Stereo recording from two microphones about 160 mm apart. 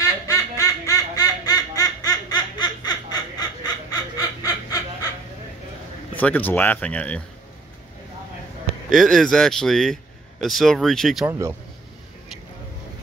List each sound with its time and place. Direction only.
0.0 s baby laughter: 20° left (ahead or behind)
6.1 s speech: 10° left (ahead or behind)
8.9 s speech: centre (ahead or behind)
11.2 s speech: 15° right (ahead or behind)